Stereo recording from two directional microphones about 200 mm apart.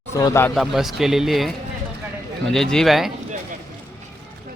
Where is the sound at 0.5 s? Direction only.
Centre (ahead or behind).